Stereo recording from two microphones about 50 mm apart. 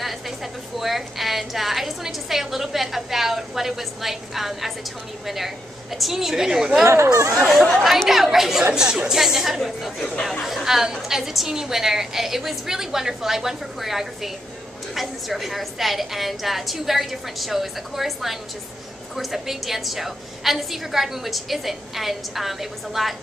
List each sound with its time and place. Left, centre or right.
0.0 s a woman's voice: centre
6.9 s speech: right
7.8 s a woman's voice: centre